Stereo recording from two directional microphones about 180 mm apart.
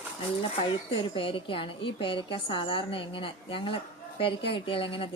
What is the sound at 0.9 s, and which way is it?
A woman's voice, 30° left (ahead or behind).